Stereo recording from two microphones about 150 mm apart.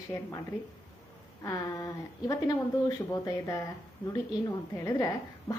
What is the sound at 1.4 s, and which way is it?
Speech, 20° left (ahead or behind).